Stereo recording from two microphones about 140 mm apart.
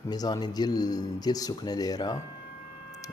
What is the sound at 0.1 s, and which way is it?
Speech, 30° left (ahead or behind).